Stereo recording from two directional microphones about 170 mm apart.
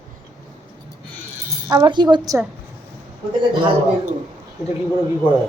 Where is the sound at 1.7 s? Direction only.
25° right (ahead or behind).